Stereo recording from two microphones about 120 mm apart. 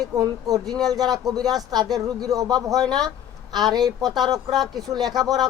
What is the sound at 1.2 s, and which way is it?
Speech, 30° right (ahead or behind).